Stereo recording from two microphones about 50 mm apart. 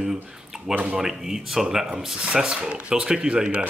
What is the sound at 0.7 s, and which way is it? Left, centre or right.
Speech, right.